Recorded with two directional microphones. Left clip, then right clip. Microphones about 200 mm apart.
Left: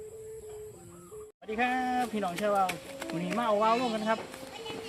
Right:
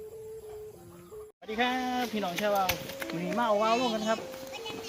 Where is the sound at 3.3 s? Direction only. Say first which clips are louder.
Even; centre (ahead or behind).